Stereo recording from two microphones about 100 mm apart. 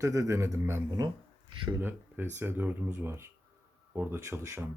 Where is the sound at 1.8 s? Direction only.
20° right (ahead or behind).